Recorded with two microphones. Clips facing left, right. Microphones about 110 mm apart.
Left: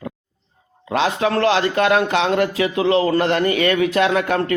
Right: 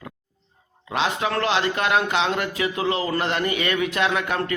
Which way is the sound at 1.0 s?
35° left (ahead or behind).